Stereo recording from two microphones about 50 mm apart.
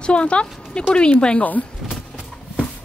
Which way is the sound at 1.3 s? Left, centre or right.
Left.